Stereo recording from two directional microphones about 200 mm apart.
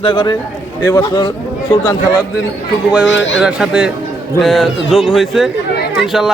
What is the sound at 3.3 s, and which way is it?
Speech, 5° right (ahead or behind).